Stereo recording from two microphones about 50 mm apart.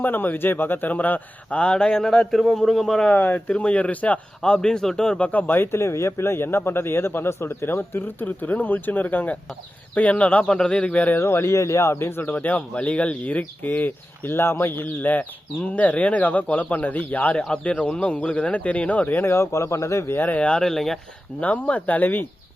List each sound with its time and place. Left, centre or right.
0.0 s speech: left
1.5 s a man's voice: centre
3.2 s a man's voice: left; by 5.2 s centre
5.2 s speech: left
5.8 s a man's voice: left
10.4 s a man's voice: centre
11.2 s speech: left
12.2 s speech: left
17.3 s a man's voice: left
19.0 s speech: left
19.3 s speech: left
20.1 s a man's voice: left
20.6 s a man's voice: centre
21.4 s speech: left